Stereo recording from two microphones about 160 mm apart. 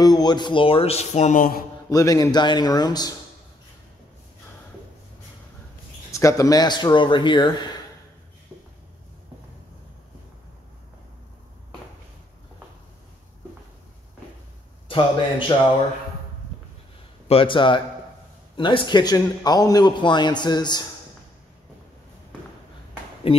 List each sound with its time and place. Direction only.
0.0 s speech: 25° left (ahead or behind); by 1.4 s 45° left (ahead or behind)
1.9 s a man's voice: 20° left (ahead or behind)
6.1 s a man's voice: 20° left (ahead or behind)
14.9 s speech: 30° left (ahead or behind)
17.3 s a man's voice: 35° left (ahead or behind)
23.3 s speech: 35° left (ahead or behind)